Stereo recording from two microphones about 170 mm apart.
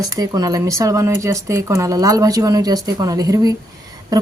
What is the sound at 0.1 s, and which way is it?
A woman's voice, 20° right (ahead or behind).